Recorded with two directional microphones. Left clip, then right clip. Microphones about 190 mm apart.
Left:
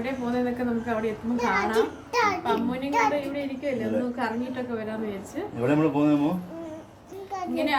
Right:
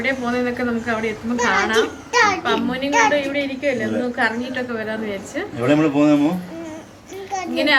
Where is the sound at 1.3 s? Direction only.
5° left (ahead or behind).